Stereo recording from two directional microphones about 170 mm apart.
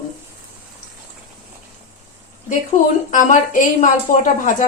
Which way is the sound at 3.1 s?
50° left (ahead or behind).